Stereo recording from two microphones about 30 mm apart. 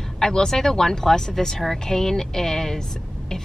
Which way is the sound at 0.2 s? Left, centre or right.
Left.